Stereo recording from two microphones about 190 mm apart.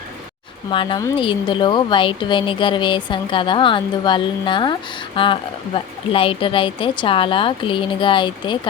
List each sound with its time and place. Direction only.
0.7 s a woman's voice: 25° left (ahead or behind)